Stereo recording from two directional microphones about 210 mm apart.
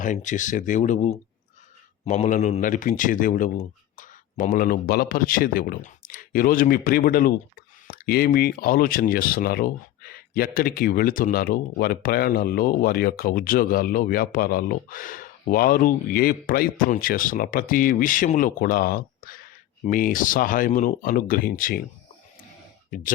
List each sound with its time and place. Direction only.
0.0 s a man's voice: 35° left (ahead or behind)